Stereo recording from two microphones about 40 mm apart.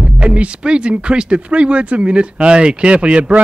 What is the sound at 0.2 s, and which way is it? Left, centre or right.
Speech, right.